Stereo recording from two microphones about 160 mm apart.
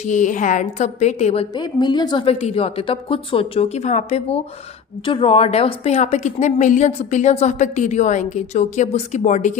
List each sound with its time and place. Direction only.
0.0 s a woman's voice: 50° left (ahead or behind)